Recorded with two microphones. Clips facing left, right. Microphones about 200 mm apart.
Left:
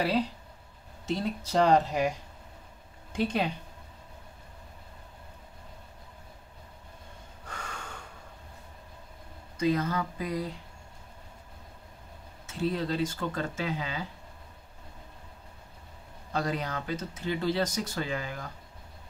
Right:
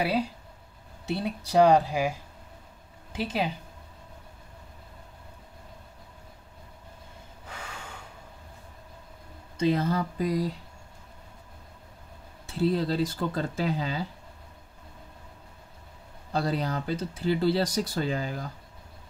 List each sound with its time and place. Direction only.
0.0 s speech: 10° right (ahead or behind)
7.4 s snort: 5° right (ahead or behind)
9.6 s speech: 30° right (ahead or behind)
12.4 s speech: 35° right (ahead or behind)
16.3 s speech: 35° right (ahead or behind)